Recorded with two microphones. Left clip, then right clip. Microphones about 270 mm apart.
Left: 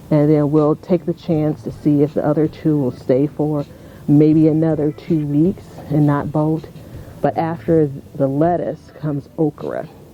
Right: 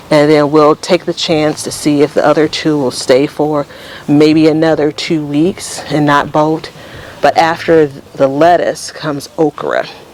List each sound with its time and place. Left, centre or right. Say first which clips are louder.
0.1 s speech: right 8 dB; centre
0.4 s speech: right 8 dB; right
0.9 s speech: right 8 dB; centre
3.3 s speech: right 8 dB; centre
4.1 s speech: right 5 dB; centre
9.3 s speech: right 9 dB; centre